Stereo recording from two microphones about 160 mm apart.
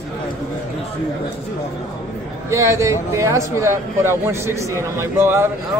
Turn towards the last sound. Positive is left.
turn(degrees=-15)  # may be behind; listen again after turning